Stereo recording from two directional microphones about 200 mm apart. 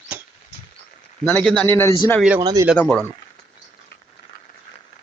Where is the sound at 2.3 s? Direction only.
20° right (ahead or behind).